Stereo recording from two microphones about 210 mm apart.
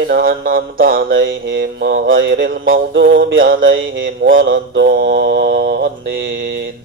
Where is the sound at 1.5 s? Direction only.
50° right (ahead or behind).